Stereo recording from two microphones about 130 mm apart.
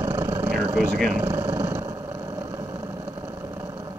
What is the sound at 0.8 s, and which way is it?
Speech, centre (ahead or behind).